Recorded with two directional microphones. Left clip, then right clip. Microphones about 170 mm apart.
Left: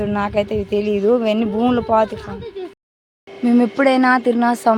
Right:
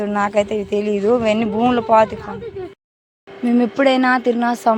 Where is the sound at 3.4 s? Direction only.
10° left (ahead or behind).